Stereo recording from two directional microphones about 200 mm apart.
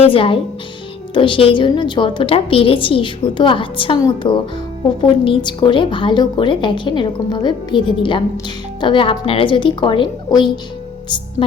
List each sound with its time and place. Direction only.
0.0 s a woman's voice: 25° left (ahead or behind)